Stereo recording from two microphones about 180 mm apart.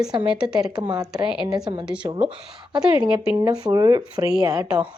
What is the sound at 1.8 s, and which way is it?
Speech, 5° right (ahead or behind).